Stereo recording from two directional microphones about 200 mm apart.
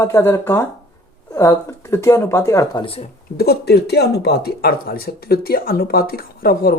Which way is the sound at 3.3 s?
50° left (ahead or behind).